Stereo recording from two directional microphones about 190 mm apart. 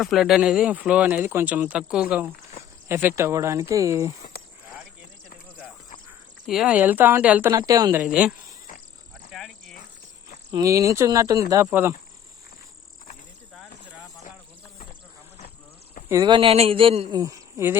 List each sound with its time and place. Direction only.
0.0 s speech: centre (ahead or behind)
6.4 s speech: centre (ahead or behind)
7.7 s a man's voice: 20° right (ahead or behind)
8.0 s speech: 5° right (ahead or behind)
9.3 s insect: centre (ahead or behind)
10.5 s speech: 15° right (ahead or behind)
13.5 s a sound: 5° left (ahead or behind)
16.2 s a man's voice: 25° right (ahead or behind)
17.2 s speech: 15° right (ahead or behind)